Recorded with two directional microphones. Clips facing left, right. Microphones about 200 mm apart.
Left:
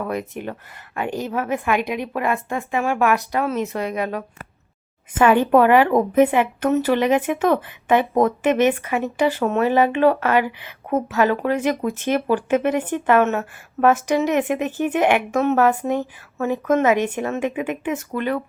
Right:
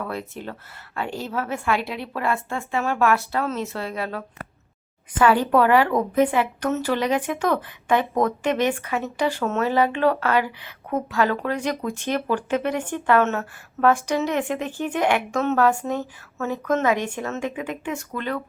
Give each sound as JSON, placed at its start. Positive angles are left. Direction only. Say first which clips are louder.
{"t": 0.1, "sound": "a woman's voice", "louder": "left 5 dB", "side_deg": 15}
{"t": 5.2, "sound": "a woman's voice", "louder": "left 3 dB", "side_deg": 20}